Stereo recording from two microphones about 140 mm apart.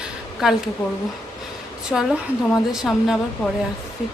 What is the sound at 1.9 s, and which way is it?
A woman's voice, 5° left (ahead or behind).